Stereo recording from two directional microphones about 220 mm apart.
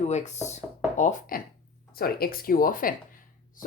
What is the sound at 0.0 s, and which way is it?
Speech, 30° left (ahead or behind).